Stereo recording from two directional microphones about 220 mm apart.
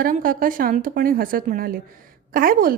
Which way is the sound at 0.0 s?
40° right (ahead or behind).